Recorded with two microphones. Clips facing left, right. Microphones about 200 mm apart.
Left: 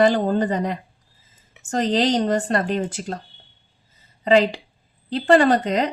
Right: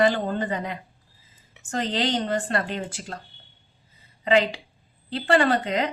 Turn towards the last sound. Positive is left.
turn(degrees=40)  # may be behind; listen again after turning